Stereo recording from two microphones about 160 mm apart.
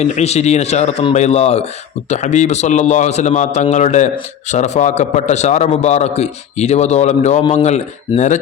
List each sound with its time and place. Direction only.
0.0 s a man's voice: 45° left (ahead or behind)